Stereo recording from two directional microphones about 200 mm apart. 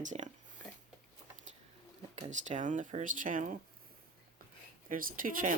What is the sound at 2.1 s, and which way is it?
Speech, 35° right (ahead or behind).